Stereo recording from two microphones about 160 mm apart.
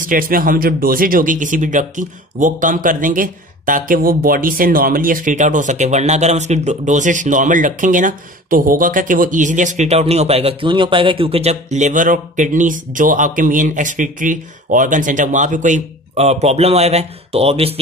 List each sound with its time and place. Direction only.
0.0 s speech: 60° right (ahead or behind); by 17.7 s 40° right (ahead or behind)